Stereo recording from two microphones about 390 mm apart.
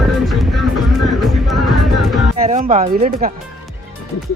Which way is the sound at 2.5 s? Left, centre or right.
Centre.